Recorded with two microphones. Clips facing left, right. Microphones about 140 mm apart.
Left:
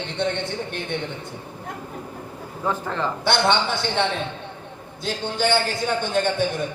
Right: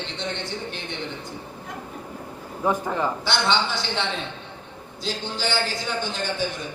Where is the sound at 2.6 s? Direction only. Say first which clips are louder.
Right 2 dB; 15° right (ahead or behind).